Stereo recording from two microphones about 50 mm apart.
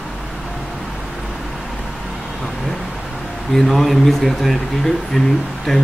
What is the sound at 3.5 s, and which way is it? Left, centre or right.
Speech, centre.